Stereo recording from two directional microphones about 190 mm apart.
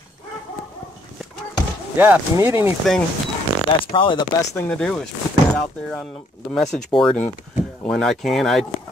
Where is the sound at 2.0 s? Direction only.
10° right (ahead or behind).